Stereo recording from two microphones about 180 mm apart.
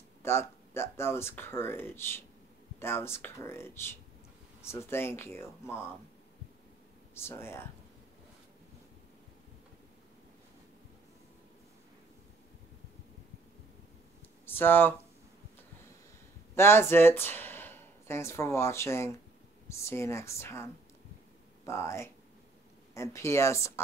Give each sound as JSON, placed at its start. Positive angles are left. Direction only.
{"t": 0.2, "sound": "speech", "side_deg": 15}
{"t": 7.2, "sound": "speech", "side_deg": 15}
{"t": 14.4, "sound": "speech", "side_deg": 10}
{"t": 16.5, "sound": "speech", "side_deg": 15}